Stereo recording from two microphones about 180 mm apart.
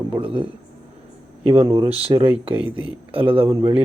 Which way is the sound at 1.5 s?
30° right (ahead or behind).